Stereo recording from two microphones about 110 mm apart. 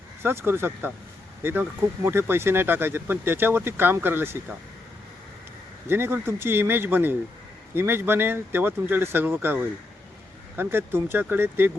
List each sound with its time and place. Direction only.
0.2 s speech: 20° right (ahead or behind)
5.9 s speech: 20° right (ahead or behind)
10.6 s speech: 20° right (ahead or behind)